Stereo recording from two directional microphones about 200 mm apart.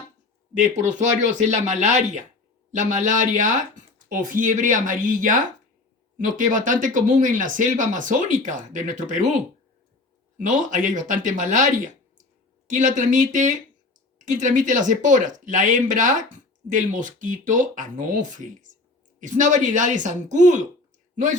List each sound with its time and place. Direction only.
0.6 s speech: 35° right (ahead or behind)